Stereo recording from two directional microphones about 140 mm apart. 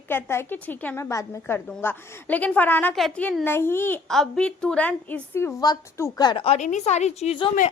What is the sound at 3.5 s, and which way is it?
Speech, 15° left (ahead or behind).